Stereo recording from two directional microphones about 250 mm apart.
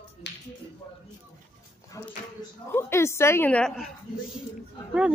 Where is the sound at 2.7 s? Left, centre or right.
Centre.